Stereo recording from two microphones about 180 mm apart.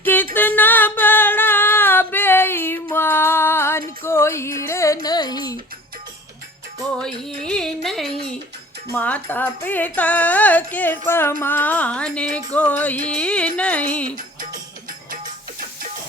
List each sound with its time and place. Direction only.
0.0 s music: 10° left (ahead or behind)
0.3 s singing: 10° left (ahead or behind)
5.0 s a sound: 20° left (ahead or behind)
7.0 s music: 5° left (ahead or behind)